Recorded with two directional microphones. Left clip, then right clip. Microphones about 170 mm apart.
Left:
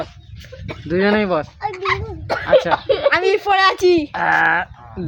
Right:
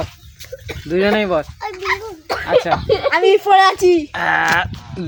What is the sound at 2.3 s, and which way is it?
Speech, 15° left (ahead or behind).